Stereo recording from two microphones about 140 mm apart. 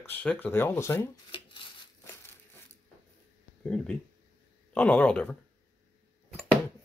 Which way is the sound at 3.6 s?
10° left (ahead or behind).